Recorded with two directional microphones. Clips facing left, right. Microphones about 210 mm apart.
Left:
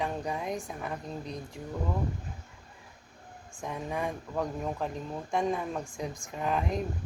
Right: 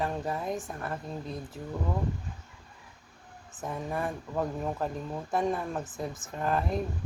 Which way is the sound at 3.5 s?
5° right (ahead or behind).